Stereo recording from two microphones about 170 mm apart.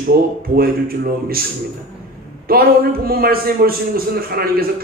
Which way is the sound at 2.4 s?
60° right (ahead or behind).